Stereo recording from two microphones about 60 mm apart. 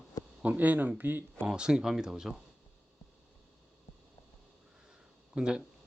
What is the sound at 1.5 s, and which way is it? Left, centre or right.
Speech, centre.